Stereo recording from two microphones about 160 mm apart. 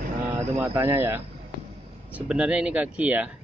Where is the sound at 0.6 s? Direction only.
15° right (ahead or behind).